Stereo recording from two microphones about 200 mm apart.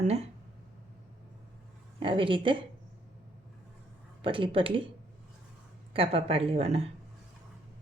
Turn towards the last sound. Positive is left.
turn(degrees=-30)  # may be behind; listen again after turning